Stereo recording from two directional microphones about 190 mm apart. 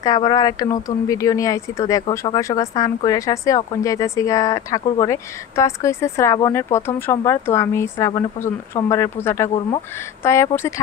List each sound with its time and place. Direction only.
0.0 s speech: 20° left (ahead or behind)